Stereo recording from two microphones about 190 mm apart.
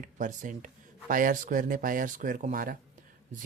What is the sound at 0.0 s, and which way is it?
Speech, 40° right (ahead or behind).